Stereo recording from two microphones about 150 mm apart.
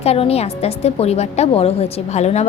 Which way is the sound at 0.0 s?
40° left (ahead or behind).